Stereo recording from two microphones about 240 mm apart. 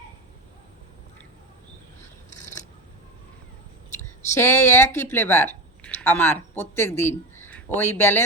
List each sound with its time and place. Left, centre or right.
2.4 s scissors: left
4.3 s speech: centre